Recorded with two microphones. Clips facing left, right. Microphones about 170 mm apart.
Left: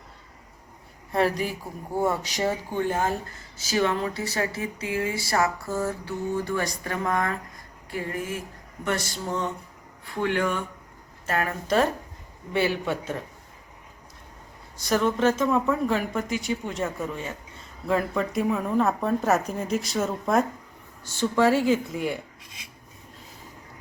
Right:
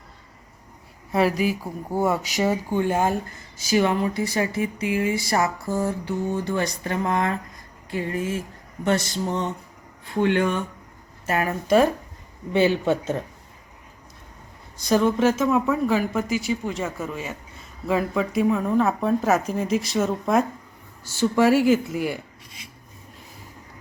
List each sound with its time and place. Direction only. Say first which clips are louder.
1.1 s speech: right 3 dB; 10° right (ahead or behind); by 10.6 s 25° right (ahead or behind)
11.3 s speech: right 5 dB; 10° right (ahead or behind)
12.5 s speech: right 5 dB; 20° right (ahead or behind)
14.8 s speech: right 3 dB; 15° right (ahead or behind)